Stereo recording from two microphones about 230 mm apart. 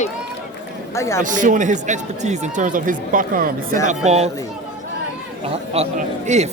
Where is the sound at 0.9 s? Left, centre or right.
Centre.